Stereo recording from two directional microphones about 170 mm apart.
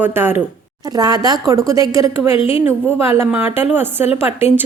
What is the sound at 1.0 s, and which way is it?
A woman's voice, 20° right (ahead or behind).